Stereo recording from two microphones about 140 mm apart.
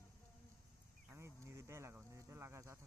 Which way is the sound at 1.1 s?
20° right (ahead or behind).